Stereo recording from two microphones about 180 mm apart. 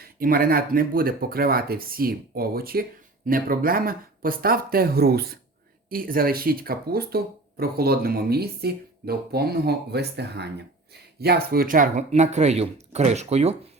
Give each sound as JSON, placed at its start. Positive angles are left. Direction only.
{"t": 0.0, "sound": "speech", "side_deg": -55}